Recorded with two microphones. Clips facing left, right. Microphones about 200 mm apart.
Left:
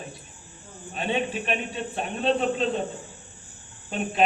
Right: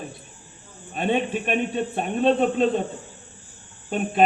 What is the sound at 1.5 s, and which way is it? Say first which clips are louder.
A man's voice: right 5 dB; 45° right (ahead or behind).